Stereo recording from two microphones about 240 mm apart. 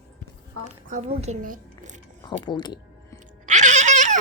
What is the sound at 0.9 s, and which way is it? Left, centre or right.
A woman's voice, right.